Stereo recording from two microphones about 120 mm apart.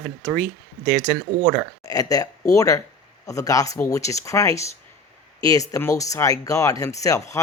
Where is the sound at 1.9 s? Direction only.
30° left (ahead or behind).